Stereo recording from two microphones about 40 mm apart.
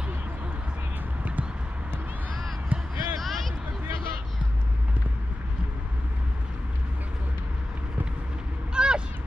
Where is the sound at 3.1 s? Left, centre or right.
Centre.